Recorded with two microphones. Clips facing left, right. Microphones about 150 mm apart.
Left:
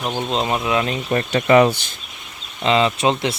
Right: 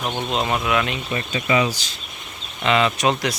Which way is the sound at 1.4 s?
50° left (ahead or behind).